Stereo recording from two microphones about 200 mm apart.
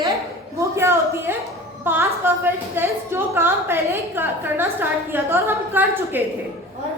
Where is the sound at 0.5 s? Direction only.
10° right (ahead or behind).